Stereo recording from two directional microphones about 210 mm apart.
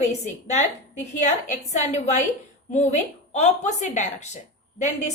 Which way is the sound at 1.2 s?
35° left (ahead or behind).